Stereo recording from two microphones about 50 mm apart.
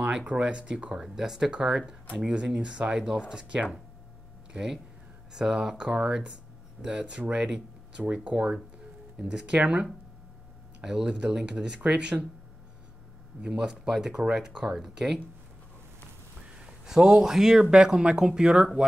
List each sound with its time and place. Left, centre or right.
0.0 s speech: right
1.0 s speech: centre
8.0 s speech: right
13.4 s speech: centre
16.4 s speech: centre